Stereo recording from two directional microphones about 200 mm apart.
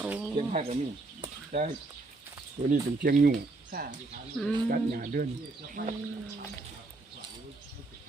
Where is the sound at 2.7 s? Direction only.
45° right (ahead or behind).